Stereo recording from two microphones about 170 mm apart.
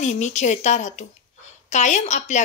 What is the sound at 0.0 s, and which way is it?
A woman's voice, 40° left (ahead or behind).